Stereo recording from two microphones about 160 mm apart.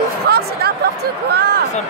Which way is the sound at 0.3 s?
80° right.